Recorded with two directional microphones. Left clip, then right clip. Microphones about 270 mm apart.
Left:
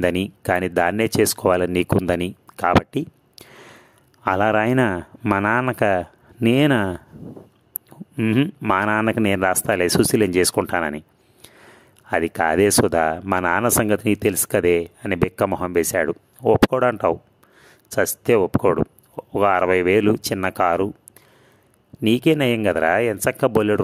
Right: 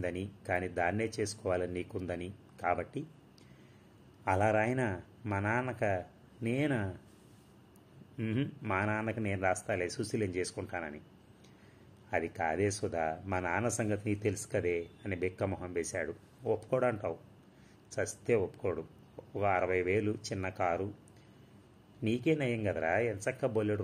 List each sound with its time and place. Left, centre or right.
0.0 s speech: left
8.2 s speech: left
12.1 s speech: left
22.0 s speech: left